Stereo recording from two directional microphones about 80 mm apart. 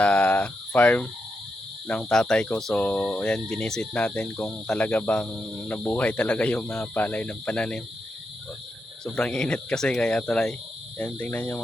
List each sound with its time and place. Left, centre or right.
0.0 s a sound: centre
1.9 s speech: centre
9.0 s speech: centre